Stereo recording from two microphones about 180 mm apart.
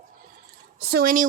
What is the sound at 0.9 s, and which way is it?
Speech, 50° right (ahead or behind).